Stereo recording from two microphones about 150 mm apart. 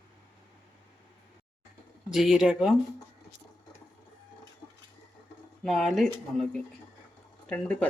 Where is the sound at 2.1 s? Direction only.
Centre (ahead or behind).